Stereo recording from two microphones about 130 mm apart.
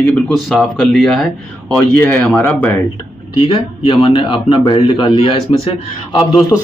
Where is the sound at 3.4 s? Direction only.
45° left (ahead or behind).